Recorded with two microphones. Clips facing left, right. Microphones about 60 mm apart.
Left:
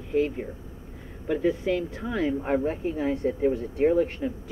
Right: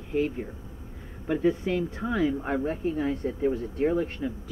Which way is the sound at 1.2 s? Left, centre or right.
Centre.